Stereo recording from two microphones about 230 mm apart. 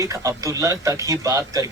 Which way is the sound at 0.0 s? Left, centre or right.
Centre.